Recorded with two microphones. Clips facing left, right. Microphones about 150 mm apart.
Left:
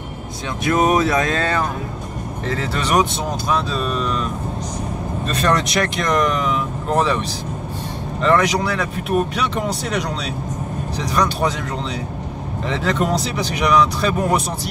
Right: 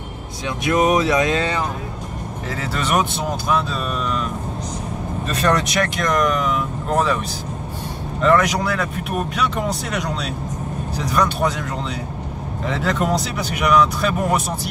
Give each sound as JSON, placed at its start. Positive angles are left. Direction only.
{"t": 0.7, "sound": "speech", "side_deg": -15}
{"t": 5.3, "sound": "speech", "side_deg": 0}
{"t": 8.2, "sound": "speech", "side_deg": -5}
{"t": 12.6, "sound": "speech", "side_deg": -5}